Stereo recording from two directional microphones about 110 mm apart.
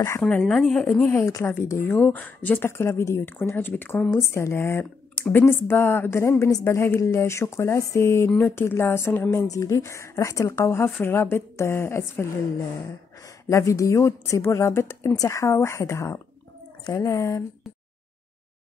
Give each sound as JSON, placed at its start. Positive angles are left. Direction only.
{"t": 0.2, "sound": "speech", "side_deg": 5}
{"t": 1.0, "sound": "speech", "side_deg": 25}